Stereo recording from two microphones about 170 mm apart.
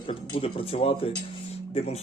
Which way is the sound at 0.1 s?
35° left (ahead or behind).